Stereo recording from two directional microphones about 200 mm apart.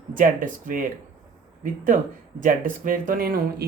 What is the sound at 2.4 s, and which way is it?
Speech, 40° right (ahead or behind).